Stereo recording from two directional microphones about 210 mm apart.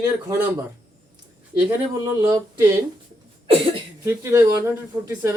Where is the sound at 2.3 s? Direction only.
15° right (ahead or behind).